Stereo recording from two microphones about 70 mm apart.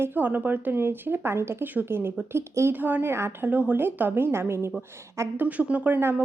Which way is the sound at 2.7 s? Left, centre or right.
Right.